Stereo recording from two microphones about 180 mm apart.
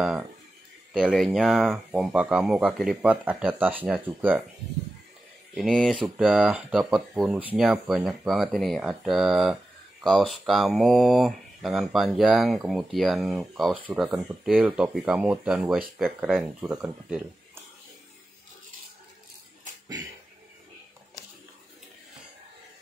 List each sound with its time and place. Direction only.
0.0 s speech: 5° right (ahead or behind)
5.5 s speech: centre (ahead or behind)